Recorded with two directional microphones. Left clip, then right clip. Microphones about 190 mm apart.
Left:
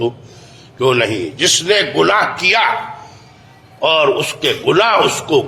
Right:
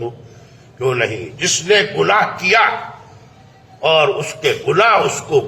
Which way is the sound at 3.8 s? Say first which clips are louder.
Left 1 dB; 35° left (ahead or behind).